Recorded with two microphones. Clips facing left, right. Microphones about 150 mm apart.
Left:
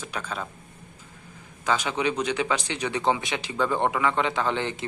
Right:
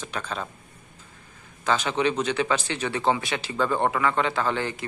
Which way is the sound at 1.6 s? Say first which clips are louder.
Right 2 dB; 10° left (ahead or behind).